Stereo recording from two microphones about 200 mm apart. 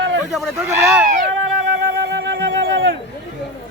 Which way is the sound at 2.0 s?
60° right (ahead or behind).